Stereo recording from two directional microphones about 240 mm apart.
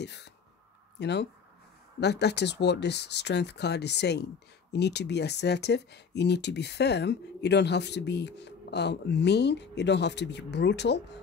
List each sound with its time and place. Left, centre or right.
0.0 s speech: left